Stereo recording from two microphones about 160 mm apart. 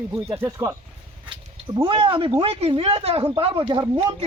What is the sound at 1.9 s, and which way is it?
Speech, 35° right (ahead or behind).